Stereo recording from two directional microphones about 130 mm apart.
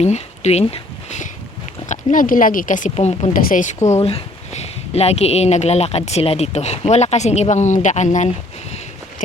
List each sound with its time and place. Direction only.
0.0 s speech: 60° left (ahead or behind)
1.9 s speech: 80° left
2.9 s speech: 55° left (ahead or behind)
3.3 s speech: 80° left
4.0 s speech: 50° left (ahead or behind); by 8.3 s 65° left (ahead or behind)